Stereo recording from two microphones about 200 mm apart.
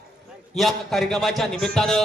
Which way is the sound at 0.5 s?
Centre (ahead or behind).